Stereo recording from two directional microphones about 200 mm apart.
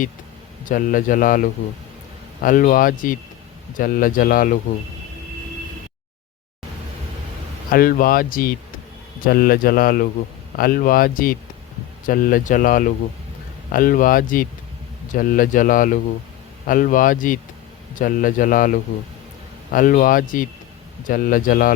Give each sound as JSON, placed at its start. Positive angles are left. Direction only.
{"t": 0.6, "sound": "a man's voice", "side_deg": 45}
{"t": 7.7, "sound": "a man's voice", "side_deg": 45}